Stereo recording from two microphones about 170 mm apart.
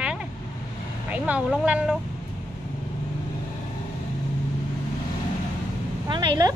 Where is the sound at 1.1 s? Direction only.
10° right (ahead or behind).